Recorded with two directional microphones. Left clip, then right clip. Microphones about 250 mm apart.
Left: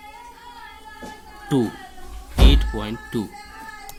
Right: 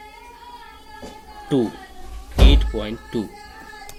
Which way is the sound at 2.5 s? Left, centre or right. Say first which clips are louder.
Right 1 dB; left.